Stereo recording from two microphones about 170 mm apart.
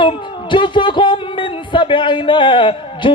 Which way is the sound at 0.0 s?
30° left (ahead or behind).